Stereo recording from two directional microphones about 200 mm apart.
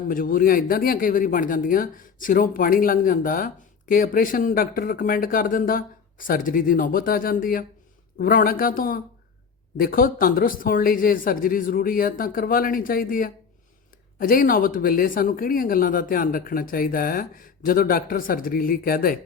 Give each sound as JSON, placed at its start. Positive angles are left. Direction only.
{"t": 0.1, "sound": "speech", "side_deg": 45}